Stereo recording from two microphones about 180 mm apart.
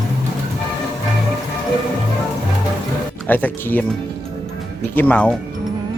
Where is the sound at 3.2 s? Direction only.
10° left (ahead or behind).